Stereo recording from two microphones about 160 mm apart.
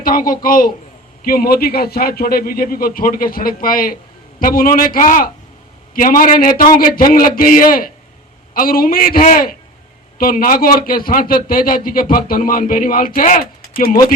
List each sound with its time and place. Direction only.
0.0 s a man's voice: 60° left (ahead or behind)